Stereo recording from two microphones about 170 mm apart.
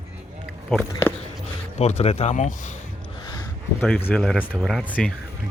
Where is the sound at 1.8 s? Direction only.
40° left (ahead or behind).